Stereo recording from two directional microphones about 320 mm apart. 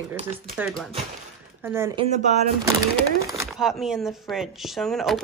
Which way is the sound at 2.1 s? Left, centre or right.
Right.